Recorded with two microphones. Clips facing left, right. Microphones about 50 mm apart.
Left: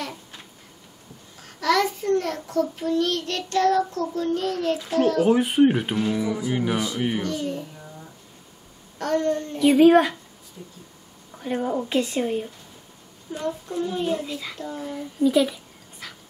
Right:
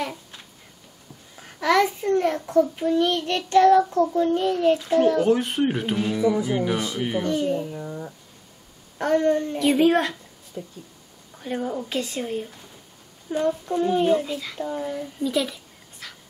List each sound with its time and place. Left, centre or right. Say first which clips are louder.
1.3 s a child's voice: right 2 dB; centre
5.2 s speech: left 3 dB; centre
7.2 s a child's voice: right 5 dB; right
8.9 s speech: right 3 dB; centre
9.6 s speech: left 6 dB; centre
10.6 s speech: right 7 dB; right
11.3 s speech: left 2 dB; centre
13.3 s a child's voice: right 5 dB; right
14.1 s speech: right 5 dB; centre
15.2 s a sound: left 6 dB; centre